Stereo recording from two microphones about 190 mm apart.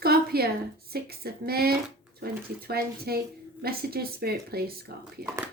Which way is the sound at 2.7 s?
55° right (ahead or behind).